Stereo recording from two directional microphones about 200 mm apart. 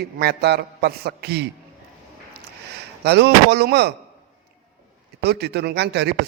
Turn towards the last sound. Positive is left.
turn(degrees=-55)  # may be behind; listen again after turning